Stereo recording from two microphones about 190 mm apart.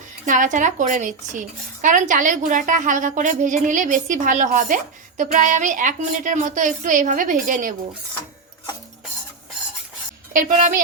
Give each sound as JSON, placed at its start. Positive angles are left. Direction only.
{"t": 0.3, "sound": "speech", "side_deg": -45}
{"t": 10.3, "sound": "speech", "side_deg": -40}